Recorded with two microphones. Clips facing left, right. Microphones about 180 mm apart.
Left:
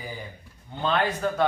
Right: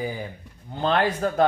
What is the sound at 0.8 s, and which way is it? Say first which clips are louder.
Speech: right 3 dB; 40° right (ahead or behind).